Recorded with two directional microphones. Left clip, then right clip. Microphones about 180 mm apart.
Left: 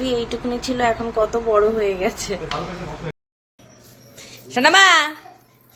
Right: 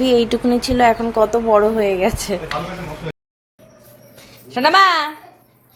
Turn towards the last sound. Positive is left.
turn(degrees=5)  # may be behind; listen again after turning